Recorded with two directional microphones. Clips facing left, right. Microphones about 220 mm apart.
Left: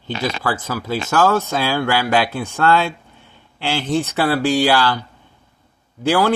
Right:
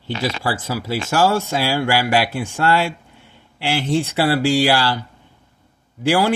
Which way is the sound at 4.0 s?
25° right (ahead or behind).